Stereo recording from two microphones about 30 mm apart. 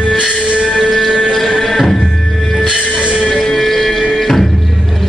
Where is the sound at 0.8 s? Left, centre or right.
Centre.